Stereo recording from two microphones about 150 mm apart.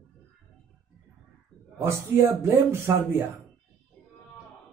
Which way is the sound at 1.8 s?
15° right (ahead or behind).